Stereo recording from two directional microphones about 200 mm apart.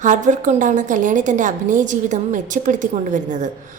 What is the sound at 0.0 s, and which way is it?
A woman's voice, 40° right (ahead or behind).